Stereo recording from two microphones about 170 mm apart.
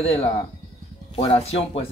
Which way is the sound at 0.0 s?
35° left (ahead or behind).